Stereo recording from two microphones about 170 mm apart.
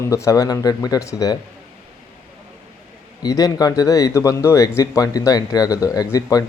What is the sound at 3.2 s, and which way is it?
Speech, 20° left (ahead or behind).